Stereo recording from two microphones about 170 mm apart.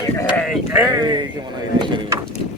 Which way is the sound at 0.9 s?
25° right (ahead or behind).